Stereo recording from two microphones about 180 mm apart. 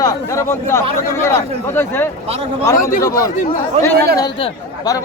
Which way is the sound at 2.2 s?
35° right (ahead or behind).